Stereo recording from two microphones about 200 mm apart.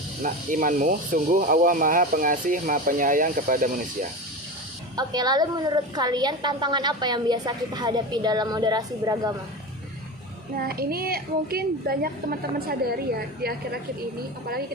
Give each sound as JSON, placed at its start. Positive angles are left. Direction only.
{"t": 0.2, "sound": "speech", "side_deg": -40}
{"t": 4.9, "sound": "a woman's voice", "side_deg": -20}
{"t": 10.6, "sound": "speech", "side_deg": -50}